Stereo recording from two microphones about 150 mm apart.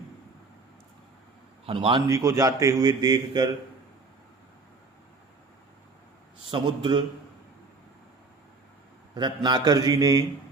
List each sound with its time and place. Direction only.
1.6 s a man's voice: 35° right (ahead or behind)
2.0 s a man's voice: 20° right (ahead or behind)
6.5 s a man's voice: 30° right (ahead or behind)
9.1 s a man's voice: 30° right (ahead or behind)